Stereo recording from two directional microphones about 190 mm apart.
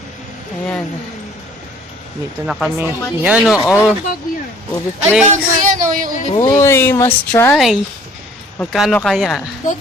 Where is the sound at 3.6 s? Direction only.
10° left (ahead or behind).